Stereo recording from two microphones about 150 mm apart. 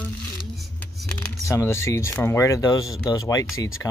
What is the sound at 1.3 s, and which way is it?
Speech, 20° left (ahead or behind).